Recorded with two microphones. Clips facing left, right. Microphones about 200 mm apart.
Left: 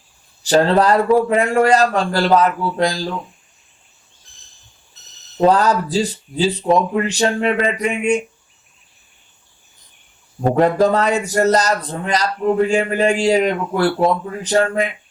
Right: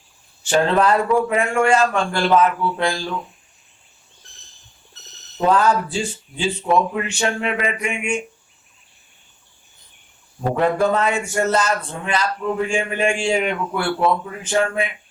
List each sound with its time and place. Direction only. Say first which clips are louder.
0.4 s speech: left 3 dB; 35° left (ahead or behind)
5.4 s speech: left 3 dB; 40° left (ahead or behind)
10.4 s speech: left 4 dB; 40° left (ahead or behind)